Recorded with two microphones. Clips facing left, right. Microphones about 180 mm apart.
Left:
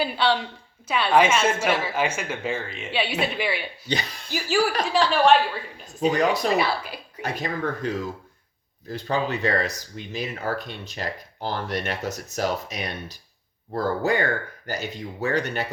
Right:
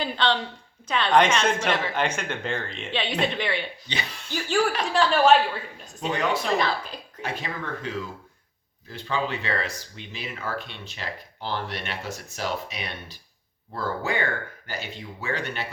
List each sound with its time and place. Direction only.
0.0 s speech: 10° left (ahead or behind)
3.8 s speech: 40° left (ahead or behind)
4.3 s a woman's voice: 5° left (ahead or behind)
6.1 s speech: 40° left (ahead or behind)
6.6 s speech: 10° left (ahead or behind)
7.2 s speech: 40° left (ahead or behind)